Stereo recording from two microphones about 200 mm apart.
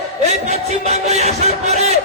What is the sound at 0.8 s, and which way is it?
Music, 35° right (ahead or behind).